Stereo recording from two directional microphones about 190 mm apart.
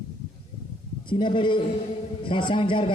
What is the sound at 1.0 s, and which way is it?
A man's voice, 25° left (ahead or behind).